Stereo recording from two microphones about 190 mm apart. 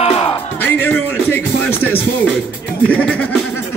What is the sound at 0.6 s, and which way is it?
Music, 10° left (ahead or behind).